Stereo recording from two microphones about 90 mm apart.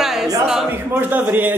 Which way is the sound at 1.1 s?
20° right (ahead or behind).